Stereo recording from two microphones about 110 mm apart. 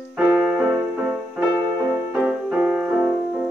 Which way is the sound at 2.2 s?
10° right (ahead or behind).